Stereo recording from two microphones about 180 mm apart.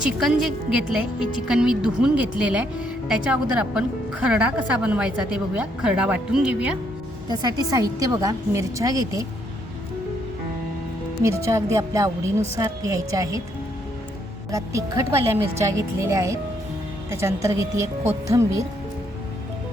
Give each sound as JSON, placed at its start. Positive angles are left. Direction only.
{"t": 0.0, "sound": "a woman's voice", "side_deg": 0}
{"t": 7.3, "sound": "a woman's voice", "side_deg": -20}
{"t": 11.2, "sound": "a woman's voice", "side_deg": -15}
{"t": 14.5, "sound": "a woman's voice", "side_deg": -15}